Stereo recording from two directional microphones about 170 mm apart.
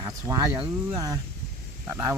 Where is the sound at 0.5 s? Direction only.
35° right (ahead or behind).